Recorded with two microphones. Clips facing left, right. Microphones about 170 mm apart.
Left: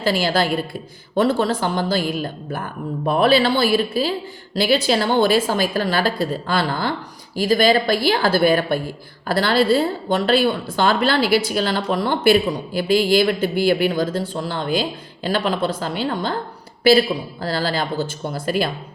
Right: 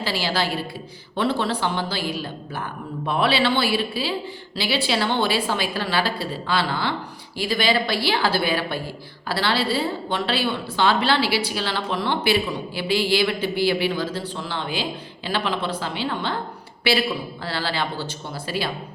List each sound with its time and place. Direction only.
0.0 s a woman's voice: 50° left (ahead or behind)
17.4 s a woman's voice: 45° left (ahead or behind)